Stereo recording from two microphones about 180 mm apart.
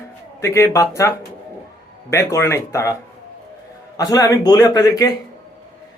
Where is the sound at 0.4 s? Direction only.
15° left (ahead or behind).